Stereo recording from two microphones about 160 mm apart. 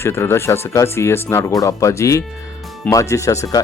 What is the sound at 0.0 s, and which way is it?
A man's voice, 15° left (ahead or behind).